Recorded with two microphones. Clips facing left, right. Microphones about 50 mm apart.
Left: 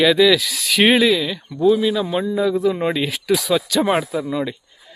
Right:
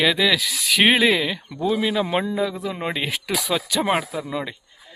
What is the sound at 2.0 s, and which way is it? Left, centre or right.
Speech, right.